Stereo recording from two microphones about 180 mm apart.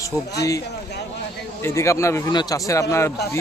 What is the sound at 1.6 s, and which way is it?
Speech, 15° left (ahead or behind).